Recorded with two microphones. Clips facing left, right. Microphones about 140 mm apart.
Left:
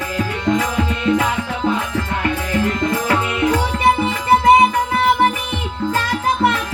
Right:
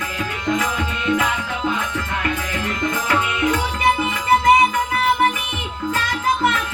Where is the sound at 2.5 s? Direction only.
35° left (ahead or behind).